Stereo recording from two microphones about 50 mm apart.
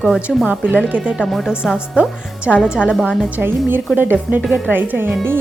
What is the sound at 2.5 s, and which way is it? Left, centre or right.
Speech, left.